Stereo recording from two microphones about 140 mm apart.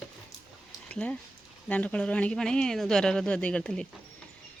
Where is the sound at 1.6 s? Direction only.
10° left (ahead or behind).